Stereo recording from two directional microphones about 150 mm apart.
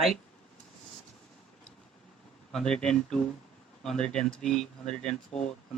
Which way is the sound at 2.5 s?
5° left (ahead or behind).